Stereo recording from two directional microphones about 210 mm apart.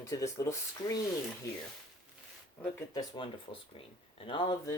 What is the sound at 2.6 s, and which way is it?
Speech, 5° left (ahead or behind).